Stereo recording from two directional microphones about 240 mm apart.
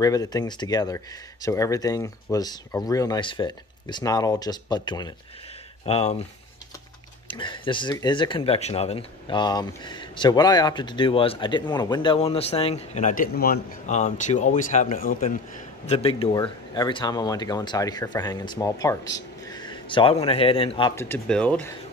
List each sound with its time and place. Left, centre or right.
0.0 s speech: centre
7.2 s speech: centre; by 15.3 s left
15.9 s speech: left
20.9 s speech: centre